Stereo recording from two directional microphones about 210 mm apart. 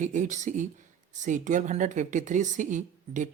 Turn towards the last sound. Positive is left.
turn(degrees=-35)  # may be behind; listen again after turning